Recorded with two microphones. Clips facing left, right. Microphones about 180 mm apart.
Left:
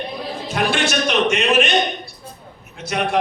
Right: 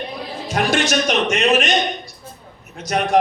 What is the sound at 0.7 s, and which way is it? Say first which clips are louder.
A man's voice: right 3 dB; 40° right (ahead or behind).